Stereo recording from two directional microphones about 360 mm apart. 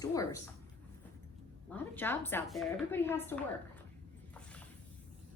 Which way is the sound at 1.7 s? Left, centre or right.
Centre.